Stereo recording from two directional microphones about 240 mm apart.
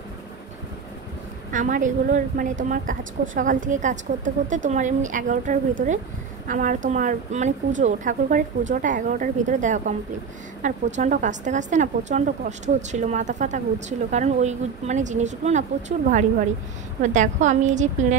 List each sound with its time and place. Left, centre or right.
1.5 s a woman's voice: right